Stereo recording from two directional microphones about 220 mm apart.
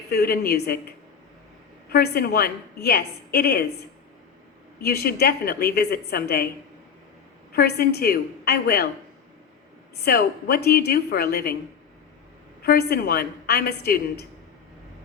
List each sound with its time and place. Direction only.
0.1 s a woman's voice: 45° left (ahead or behind)
4.8 s a woman's voice: 45° left (ahead or behind)
7.5 s a woman's voice: 45° left (ahead or behind)
10.0 s a woman's voice: 45° left (ahead or behind)
12.6 s a woman's voice: 45° left (ahead or behind)